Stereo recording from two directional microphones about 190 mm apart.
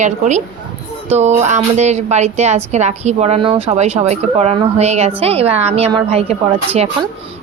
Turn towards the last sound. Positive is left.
turn(degrees=-35)  # may be behind; listen again after turning